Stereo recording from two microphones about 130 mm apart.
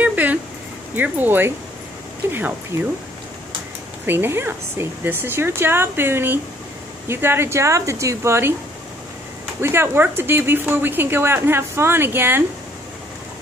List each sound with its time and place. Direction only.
0.0 s a sound: 10° right (ahead or behind)
0.9 s speech: 15° right (ahead or behind)
4.0 s speech: 15° right (ahead or behind)
9.6 s speech: 20° right (ahead or behind)